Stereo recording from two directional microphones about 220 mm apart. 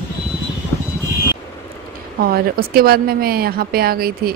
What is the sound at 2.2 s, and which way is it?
A woman's voice, 45° right (ahead or behind).